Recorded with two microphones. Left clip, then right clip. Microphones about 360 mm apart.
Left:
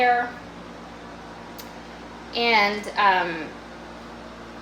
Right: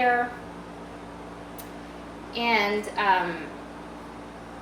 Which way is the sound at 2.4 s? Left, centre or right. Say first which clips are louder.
Left 4 dB; left.